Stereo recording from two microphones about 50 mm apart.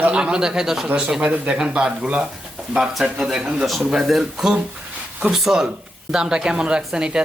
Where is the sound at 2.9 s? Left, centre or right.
Centre.